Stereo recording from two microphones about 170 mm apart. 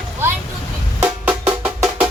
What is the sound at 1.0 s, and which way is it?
Music, 10° right (ahead or behind).